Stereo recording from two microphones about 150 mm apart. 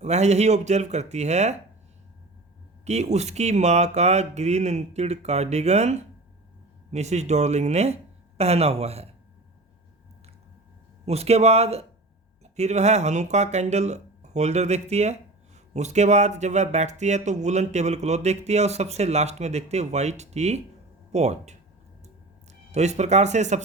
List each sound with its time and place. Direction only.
0.0 s speech: 50° right (ahead or behind)
2.8 s speech: 50° right (ahead or behind)
11.0 s speech: 45° right (ahead or behind)
22.7 s speech: 50° right (ahead or behind)